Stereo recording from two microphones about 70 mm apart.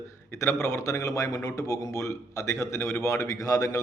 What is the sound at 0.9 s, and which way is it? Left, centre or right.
A man's voice, left.